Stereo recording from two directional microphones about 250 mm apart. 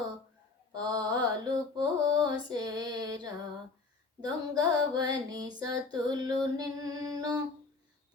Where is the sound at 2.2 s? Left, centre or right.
Centre.